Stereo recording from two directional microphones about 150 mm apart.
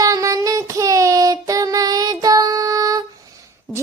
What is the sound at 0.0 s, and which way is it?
Child singing, 20° right (ahead or behind).